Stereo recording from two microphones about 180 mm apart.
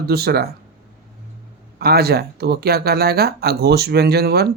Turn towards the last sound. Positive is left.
turn(degrees=-65)  # may be behind; listen again after turning